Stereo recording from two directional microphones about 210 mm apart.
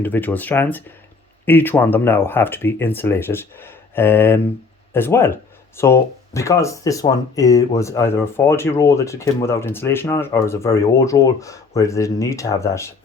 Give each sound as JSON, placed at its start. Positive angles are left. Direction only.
{"t": 0.0, "sound": "speech", "side_deg": 10}